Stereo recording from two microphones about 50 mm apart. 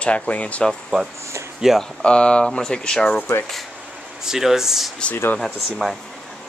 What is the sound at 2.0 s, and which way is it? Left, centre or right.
Speech, left.